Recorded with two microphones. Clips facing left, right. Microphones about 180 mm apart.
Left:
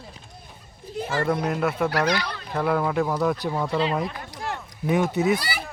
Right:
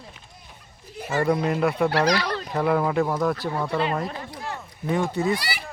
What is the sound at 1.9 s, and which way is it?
Speech, 30° right (ahead or behind).